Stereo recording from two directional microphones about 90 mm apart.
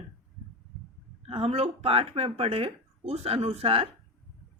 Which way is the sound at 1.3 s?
90° right.